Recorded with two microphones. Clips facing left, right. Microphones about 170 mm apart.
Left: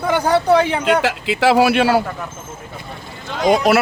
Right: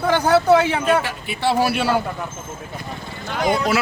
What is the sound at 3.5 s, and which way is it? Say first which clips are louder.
Speech: left 7 dB; 75° left (ahead or behind).